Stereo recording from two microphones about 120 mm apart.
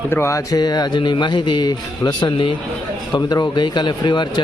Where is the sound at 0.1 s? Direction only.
25° left (ahead or behind).